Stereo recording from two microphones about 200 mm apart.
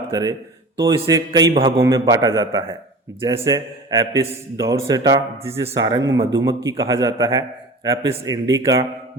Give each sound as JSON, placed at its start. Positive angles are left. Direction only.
{"t": 0.1, "sound": "a man's voice", "side_deg": -15}